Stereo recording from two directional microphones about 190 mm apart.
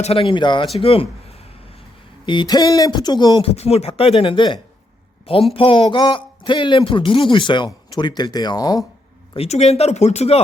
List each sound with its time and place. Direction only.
0.0 s speech: 30° left (ahead or behind)
2.2 s a woman's voice: 25° left (ahead or behind)
9.3 s speech: 35° left (ahead or behind)